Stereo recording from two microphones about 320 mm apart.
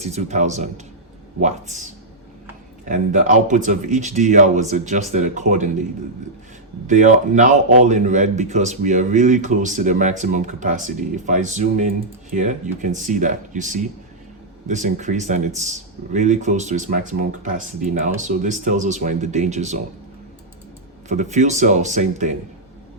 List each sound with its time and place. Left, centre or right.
0.0 s a man's voice: centre
6.8 s a man's voice: right
21.1 s a man's voice: right